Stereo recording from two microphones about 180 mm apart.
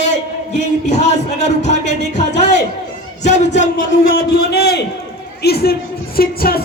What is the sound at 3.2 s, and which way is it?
Speech, 40° left (ahead or behind).